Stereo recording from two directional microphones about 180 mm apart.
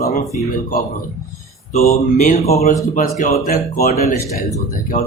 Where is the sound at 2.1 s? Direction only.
45° left (ahead or behind).